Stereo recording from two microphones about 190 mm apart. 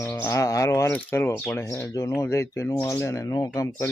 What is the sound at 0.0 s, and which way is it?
Speech, 15° left (ahead or behind).